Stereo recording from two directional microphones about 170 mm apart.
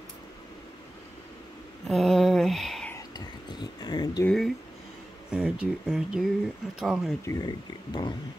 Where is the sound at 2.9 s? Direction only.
25° left (ahead or behind).